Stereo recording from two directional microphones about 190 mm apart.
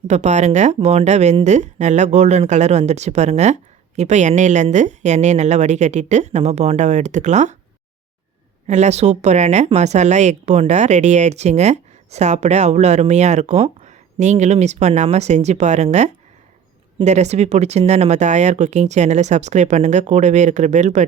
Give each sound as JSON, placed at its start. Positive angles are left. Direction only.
{"t": 0.1, "sound": "speech", "side_deg": -35}
{"t": 8.6, "sound": "speech", "side_deg": -35}